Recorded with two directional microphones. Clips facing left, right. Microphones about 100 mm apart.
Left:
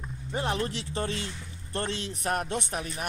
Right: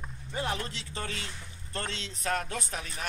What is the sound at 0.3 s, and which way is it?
Speech, 25° left (ahead or behind).